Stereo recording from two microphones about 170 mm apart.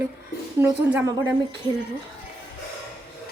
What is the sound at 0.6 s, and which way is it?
Speech, 10° right (ahead or behind).